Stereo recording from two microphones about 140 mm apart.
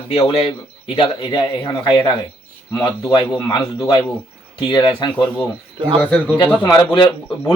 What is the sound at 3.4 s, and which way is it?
A man's voice, 30° left (ahead or behind).